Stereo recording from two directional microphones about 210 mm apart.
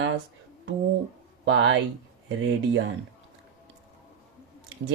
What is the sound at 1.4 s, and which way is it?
Speech, 60° right (ahead or behind).